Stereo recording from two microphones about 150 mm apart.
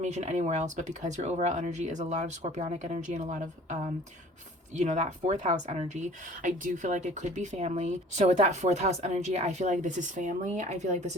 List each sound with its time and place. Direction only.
0.0 s speech: 50° right (ahead or behind)